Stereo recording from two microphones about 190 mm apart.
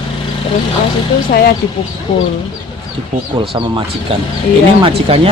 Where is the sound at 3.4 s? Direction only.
30° right (ahead or behind).